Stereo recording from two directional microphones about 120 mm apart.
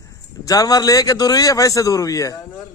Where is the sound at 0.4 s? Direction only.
30° left (ahead or behind).